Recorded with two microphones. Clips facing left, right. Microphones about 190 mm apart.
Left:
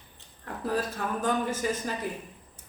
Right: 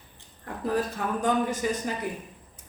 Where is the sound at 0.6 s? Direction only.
15° right (ahead or behind).